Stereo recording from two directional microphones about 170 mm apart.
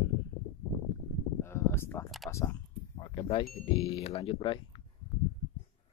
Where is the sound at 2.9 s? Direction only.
30° left (ahead or behind).